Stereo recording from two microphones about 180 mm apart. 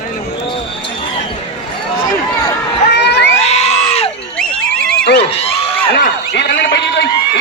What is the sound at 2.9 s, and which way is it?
Crowd, 70° left (ahead or behind).